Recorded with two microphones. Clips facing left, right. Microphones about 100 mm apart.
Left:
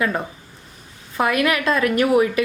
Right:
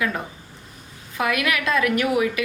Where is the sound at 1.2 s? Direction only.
35° left (ahead or behind).